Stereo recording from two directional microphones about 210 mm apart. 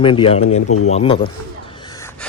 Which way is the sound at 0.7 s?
90° left.